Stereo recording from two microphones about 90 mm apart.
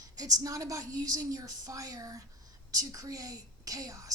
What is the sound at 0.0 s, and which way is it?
A woman's voice, 45° right (ahead or behind).